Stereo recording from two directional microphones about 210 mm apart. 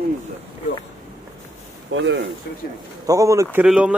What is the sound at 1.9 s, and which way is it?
Speech, 60° right (ahead or behind).